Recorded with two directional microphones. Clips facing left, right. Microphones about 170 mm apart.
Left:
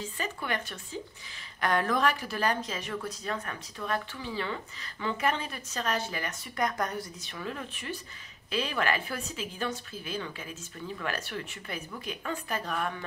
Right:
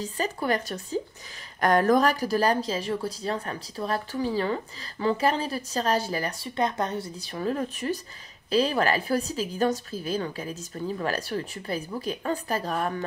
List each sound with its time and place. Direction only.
0.0 s a woman's voice: 40° right (ahead or behind)